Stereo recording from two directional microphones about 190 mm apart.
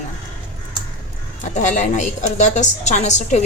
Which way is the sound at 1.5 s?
40° left (ahead or behind).